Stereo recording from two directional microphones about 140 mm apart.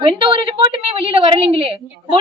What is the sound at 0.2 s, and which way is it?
A woman's voice, 40° right (ahead or behind).